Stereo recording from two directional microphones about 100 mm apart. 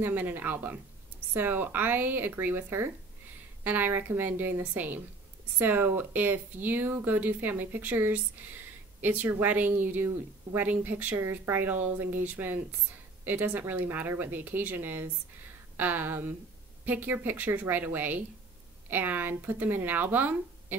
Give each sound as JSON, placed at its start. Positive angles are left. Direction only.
{"t": 0.0, "sound": "a woman's voice", "side_deg": -20}